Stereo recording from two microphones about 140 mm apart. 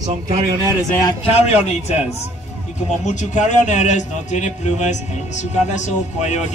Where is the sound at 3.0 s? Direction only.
60° left (ahead or behind).